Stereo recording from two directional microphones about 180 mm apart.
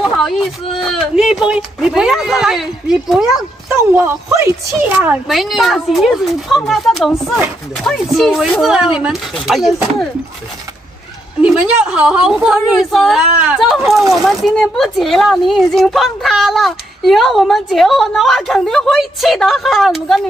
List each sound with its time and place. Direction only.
0.0 s speech: centre (ahead or behind)
11.4 s speech: 5° right (ahead or behind)